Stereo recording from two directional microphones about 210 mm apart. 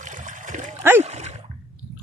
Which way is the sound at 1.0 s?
30° right (ahead or behind).